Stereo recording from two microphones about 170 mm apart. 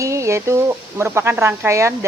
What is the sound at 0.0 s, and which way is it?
Speech, 15° right (ahead or behind).